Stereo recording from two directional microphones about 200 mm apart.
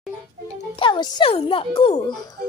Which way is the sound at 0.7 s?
25° left (ahead or behind).